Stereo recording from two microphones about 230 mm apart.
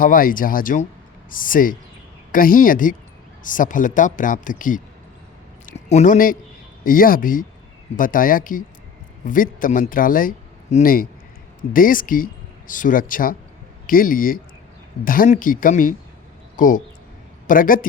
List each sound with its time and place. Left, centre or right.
0.0 s a woman's voice: left